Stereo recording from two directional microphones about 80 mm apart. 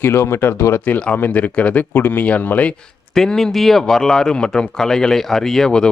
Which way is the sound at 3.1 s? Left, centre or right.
Centre.